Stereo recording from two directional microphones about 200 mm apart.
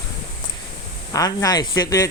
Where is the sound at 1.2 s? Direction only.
20° left (ahead or behind).